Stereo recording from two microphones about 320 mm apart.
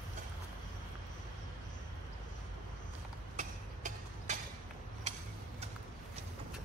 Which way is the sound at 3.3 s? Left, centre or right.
Right.